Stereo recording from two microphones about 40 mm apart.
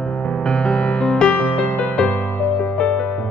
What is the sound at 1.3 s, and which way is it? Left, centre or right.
Music, left.